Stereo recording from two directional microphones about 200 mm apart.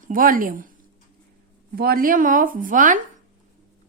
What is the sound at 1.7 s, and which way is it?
Speech, 50° right (ahead or behind).